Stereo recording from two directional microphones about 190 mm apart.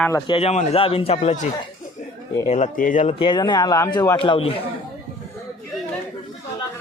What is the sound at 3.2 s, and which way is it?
A man's voice, 25° left (ahead or behind).